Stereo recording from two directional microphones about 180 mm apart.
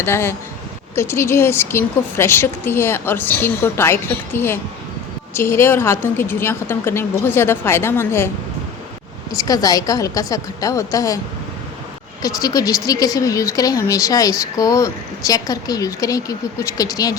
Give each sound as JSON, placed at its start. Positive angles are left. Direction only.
{"t": 0.0, "sound": "a woman's voice", "side_deg": 15}
{"t": 9.3, "sound": "speech", "side_deg": 20}
{"t": 12.2, "sound": "speech", "side_deg": 20}